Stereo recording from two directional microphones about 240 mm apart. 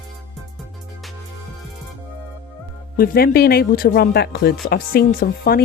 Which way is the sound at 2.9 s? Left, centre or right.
Left.